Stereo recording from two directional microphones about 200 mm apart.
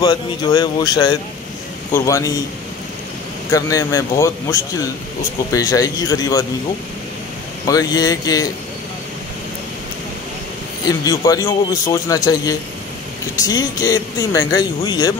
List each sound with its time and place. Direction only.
0.0 s a man's voice: 20° left (ahead or behind)
3.5 s a man's voice: 15° left (ahead or behind)
7.6 s speech: 20° left (ahead or behind)
10.9 s a man's voice: 20° left (ahead or behind)